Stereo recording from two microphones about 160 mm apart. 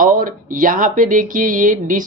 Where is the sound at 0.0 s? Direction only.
60° right (ahead or behind).